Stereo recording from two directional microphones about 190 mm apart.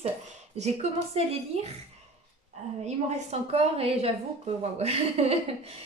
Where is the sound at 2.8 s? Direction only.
35° right (ahead or behind).